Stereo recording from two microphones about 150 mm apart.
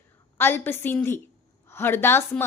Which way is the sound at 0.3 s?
15° left (ahead or behind).